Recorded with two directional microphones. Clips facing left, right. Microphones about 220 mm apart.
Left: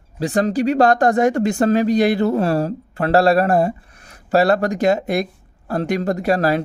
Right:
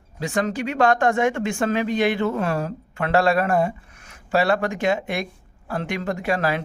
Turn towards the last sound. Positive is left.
turn(degrees=40)  # may be behind; listen again after turning